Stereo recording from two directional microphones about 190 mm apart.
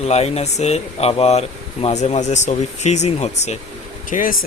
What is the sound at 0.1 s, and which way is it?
Speech, 35° left (ahead or behind).